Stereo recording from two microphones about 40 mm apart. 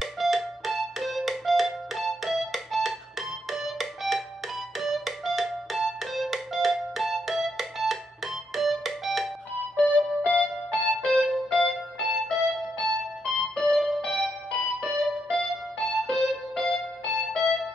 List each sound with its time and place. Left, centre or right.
0.0 s music: centre
9.8 s music: left
10.7 s music: centre